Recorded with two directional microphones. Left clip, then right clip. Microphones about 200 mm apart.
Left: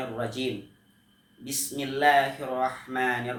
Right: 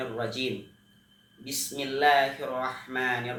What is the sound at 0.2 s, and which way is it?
Speech, 10° left (ahead or behind).